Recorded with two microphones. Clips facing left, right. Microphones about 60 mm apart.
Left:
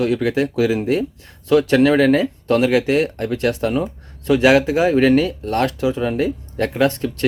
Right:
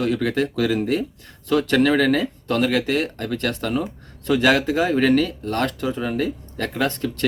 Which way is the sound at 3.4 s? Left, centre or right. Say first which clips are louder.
Left 5 dB; left.